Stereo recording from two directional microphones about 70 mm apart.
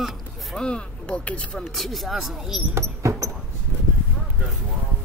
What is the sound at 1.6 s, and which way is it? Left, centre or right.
Speech, centre.